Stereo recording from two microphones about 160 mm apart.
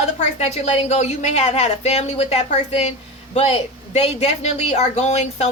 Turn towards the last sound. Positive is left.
turn(degrees=45)  # may be behind; listen again after turning